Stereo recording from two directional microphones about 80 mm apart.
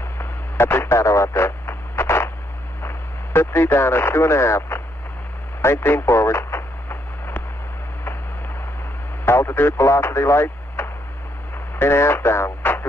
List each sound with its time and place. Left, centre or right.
0.2 s radio: left
2.8 s speech: left
5.6 s radio: left
9.2 s speech: left
11.5 s music: left